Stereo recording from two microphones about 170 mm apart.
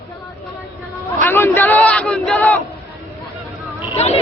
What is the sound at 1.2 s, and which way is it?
Battle cry, 10° left (ahead or behind).